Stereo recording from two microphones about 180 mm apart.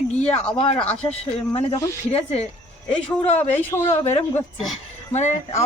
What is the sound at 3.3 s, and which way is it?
Speech, 10° left (ahead or behind).